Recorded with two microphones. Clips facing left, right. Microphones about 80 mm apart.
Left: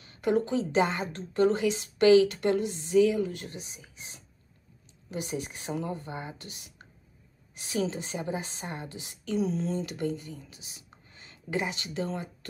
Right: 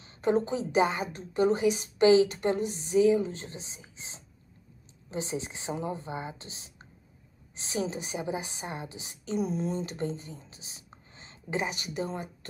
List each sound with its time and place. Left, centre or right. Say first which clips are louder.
0.0 s a woman's voice: even; right